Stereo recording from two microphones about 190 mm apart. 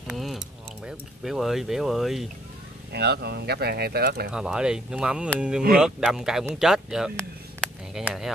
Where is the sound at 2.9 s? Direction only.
60° right (ahead or behind).